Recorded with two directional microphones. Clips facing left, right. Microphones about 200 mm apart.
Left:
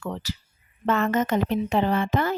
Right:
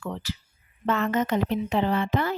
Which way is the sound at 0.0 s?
40° left (ahead or behind).